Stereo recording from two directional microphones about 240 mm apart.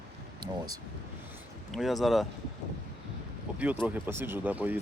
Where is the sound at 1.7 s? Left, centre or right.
Centre.